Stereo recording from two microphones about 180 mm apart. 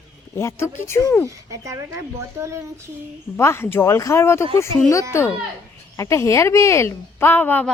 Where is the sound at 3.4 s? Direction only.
15° left (ahead or behind).